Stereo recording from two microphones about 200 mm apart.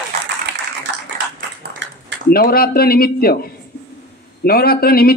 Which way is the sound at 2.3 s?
50° left (ahead or behind).